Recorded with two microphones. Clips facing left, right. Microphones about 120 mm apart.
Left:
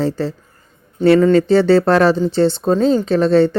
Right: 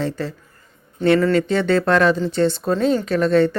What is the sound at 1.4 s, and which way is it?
Speech, 35° left (ahead or behind).